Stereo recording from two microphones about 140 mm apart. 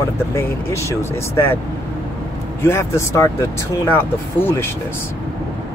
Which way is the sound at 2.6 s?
20° left (ahead or behind).